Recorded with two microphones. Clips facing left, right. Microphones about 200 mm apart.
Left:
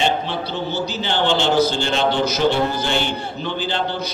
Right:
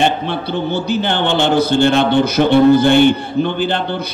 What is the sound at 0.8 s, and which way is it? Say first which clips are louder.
A man's voice: right 4 dB; 55° right (ahead or behind).